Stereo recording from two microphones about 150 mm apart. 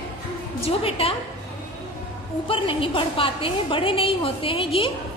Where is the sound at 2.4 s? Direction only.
35° left (ahead or behind).